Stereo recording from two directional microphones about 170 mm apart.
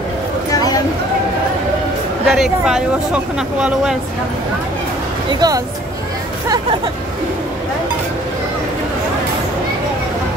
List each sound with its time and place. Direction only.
0.5 s a sound: 20° left (ahead or behind)
2.2 s speech: centre (ahead or behind)
5.3 s speech: 25° right (ahead or behind)